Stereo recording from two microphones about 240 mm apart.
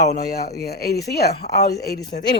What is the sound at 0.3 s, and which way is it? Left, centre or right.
Speech, left.